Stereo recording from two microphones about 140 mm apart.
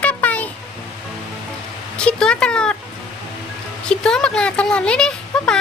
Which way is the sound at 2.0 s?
5° left (ahead or behind).